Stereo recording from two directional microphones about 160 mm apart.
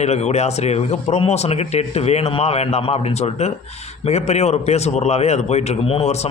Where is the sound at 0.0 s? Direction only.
45° left (ahead or behind).